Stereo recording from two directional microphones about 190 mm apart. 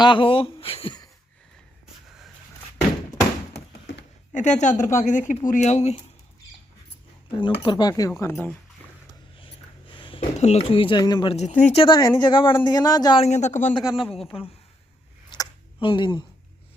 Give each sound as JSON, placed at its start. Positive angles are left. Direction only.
{"t": 0.0, "sound": "speech", "side_deg": 25}
{"t": 3.9, "sound": "a sound", "side_deg": 75}
{"t": 4.3, "sound": "a woman's voice", "side_deg": 40}
{"t": 7.3, "sound": "a man's voice", "side_deg": 25}
{"t": 9.4, "sound": "a man's voice", "side_deg": 25}
{"t": 13.2, "sound": "a woman's voice", "side_deg": 35}
{"t": 13.7, "sound": "a man's voice", "side_deg": 25}
{"t": 15.3, "sound": "a sound", "side_deg": 25}